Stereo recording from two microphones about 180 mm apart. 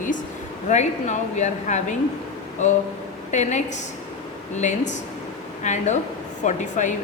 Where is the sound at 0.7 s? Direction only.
40° left (ahead or behind).